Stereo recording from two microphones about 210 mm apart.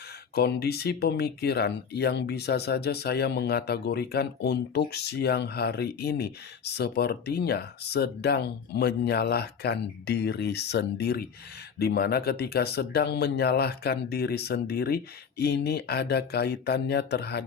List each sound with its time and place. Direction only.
0.3 s speech: 50° left (ahead or behind)